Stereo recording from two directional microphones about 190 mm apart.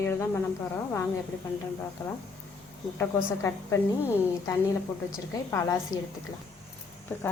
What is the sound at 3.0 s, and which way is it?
A woman's voice, 15° left (ahead or behind).